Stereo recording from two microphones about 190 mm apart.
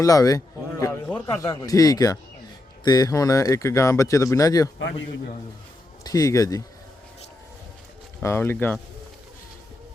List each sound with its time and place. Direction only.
0.0 s a man's voice: 15° left (ahead or behind)
6.0 s speech: 20° left (ahead or behind)
8.2 s speech: 15° left (ahead or behind)